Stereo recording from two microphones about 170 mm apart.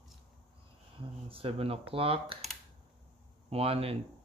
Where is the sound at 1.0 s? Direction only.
30° right (ahead or behind).